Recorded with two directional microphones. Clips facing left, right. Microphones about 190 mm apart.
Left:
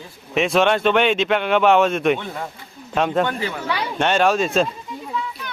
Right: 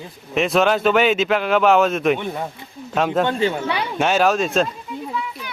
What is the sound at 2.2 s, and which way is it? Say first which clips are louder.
Speech: right 4 dB; 20° right (ahead or behind).